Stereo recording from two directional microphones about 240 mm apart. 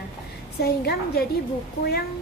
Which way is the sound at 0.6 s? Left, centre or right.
Left.